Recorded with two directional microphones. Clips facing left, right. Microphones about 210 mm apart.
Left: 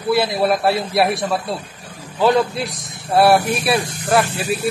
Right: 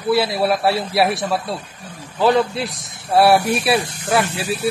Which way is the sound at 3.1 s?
5° right (ahead or behind).